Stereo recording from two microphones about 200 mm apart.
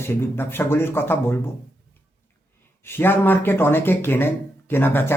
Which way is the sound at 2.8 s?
10° left (ahead or behind).